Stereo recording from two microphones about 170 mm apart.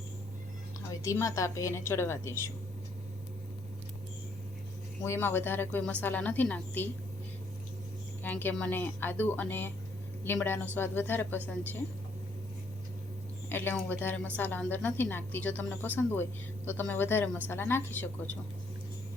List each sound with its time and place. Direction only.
1.0 s a woman's voice: 20° left (ahead or behind)
5.0 s a woman's voice: 15° left (ahead or behind)
8.2 s a woman's voice: 10° left (ahead or behind)
13.5 s a woman's voice: 10° left (ahead or behind)